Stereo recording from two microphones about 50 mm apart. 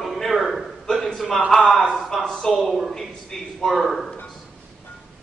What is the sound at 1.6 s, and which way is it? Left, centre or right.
Speech, left.